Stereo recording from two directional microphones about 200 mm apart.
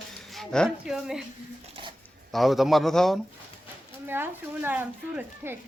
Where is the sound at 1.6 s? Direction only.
25° right (ahead or behind).